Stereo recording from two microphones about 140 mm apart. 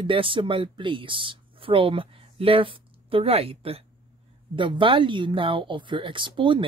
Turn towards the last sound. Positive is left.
turn(degrees=-35)  # may be behind; listen again after turning